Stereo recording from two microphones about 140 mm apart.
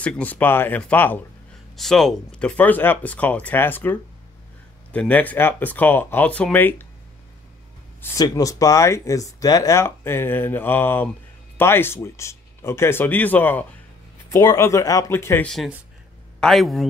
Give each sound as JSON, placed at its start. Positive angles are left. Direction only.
{"t": 0.0, "sound": "speech", "side_deg": 10}
{"t": 1.8, "sound": "speech", "side_deg": 5}
{"t": 8.0, "sound": "speech", "side_deg": 20}
{"t": 14.3, "sound": "speech", "side_deg": 25}
{"t": 15.4, "sound": "a man's voice", "side_deg": 0}